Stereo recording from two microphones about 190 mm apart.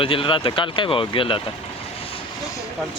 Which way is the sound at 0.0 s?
30° left (ahead or behind).